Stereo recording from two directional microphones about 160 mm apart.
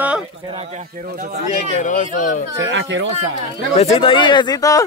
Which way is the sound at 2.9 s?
90° right.